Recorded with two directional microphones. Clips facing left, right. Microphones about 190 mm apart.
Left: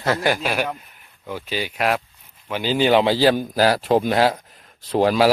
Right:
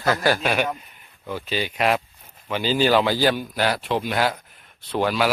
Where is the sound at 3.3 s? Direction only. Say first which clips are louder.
Left 5 dB; 45° left (ahead or behind).